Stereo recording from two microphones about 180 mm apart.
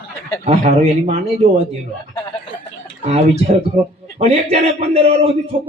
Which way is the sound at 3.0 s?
35° right (ahead or behind).